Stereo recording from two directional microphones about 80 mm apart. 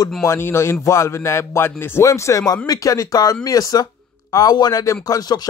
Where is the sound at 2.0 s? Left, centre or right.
Left.